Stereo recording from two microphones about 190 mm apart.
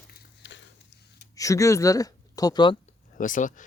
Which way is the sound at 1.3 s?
15° left (ahead or behind).